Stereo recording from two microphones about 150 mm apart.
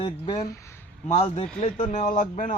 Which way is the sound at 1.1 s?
40° left (ahead or behind).